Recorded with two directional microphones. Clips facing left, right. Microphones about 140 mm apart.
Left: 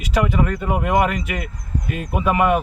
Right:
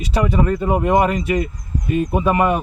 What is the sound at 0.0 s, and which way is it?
Speech, 35° right (ahead or behind).